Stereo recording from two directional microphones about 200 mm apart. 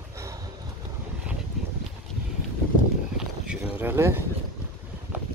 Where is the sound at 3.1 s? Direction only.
5° right (ahead or behind).